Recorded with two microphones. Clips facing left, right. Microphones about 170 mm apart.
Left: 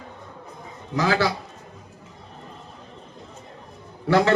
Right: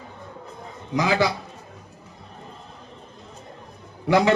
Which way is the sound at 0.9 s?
15° right (ahead or behind).